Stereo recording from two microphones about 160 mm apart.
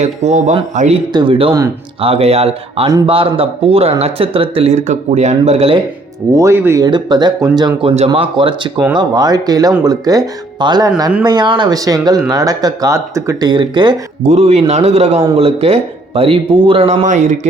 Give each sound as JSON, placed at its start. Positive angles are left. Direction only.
{"t": 0.0, "sound": "a man's voice", "side_deg": -45}
{"t": 1.1, "sound": "speech", "side_deg": -30}
{"t": 6.3, "sound": "speech", "side_deg": -15}
{"t": 7.8, "sound": "speech", "side_deg": -40}
{"t": 14.3, "sound": "a man's voice", "side_deg": -45}